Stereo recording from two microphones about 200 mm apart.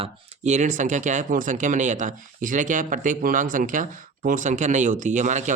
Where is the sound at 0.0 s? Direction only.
35° right (ahead or behind).